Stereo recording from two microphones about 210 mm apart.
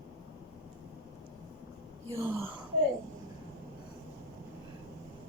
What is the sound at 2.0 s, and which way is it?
Speech, 10° right (ahead or behind).